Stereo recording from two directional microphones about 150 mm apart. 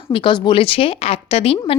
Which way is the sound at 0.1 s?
35° left (ahead or behind).